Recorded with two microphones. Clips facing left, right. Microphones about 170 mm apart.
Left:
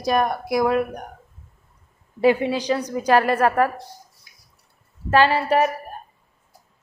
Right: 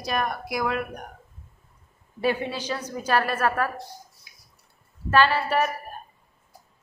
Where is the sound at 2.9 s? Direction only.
20° left (ahead or behind).